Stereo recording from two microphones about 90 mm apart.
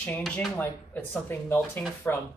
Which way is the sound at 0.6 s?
20° left (ahead or behind).